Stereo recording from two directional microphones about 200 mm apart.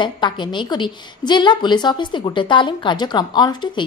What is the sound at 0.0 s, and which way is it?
A woman's voice, 25° left (ahead or behind).